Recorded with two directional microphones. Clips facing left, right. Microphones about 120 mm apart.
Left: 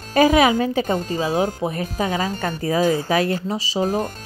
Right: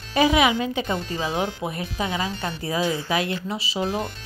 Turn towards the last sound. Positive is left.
turn(degrees=45)  # may be behind; listen again after turning